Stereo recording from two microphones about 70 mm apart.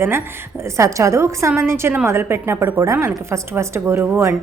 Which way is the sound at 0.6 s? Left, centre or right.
Right.